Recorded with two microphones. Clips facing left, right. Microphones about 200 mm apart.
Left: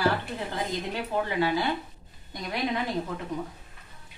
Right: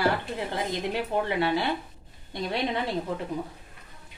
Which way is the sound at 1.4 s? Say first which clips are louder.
Even; 25° right (ahead or behind).